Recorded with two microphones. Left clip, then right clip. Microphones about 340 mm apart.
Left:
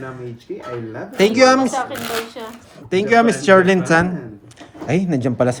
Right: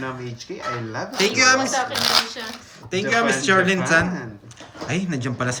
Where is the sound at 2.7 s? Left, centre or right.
Centre.